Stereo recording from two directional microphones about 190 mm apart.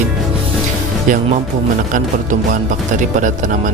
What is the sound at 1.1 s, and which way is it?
A man's voice, 45° right (ahead or behind).